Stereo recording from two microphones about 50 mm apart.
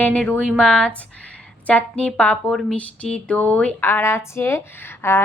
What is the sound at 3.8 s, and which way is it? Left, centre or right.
Speech, left.